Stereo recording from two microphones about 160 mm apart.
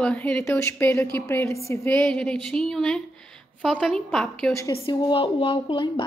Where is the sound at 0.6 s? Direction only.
15° left (ahead or behind).